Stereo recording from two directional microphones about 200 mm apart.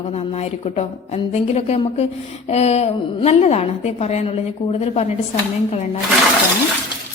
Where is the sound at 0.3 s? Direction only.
30° left (ahead or behind).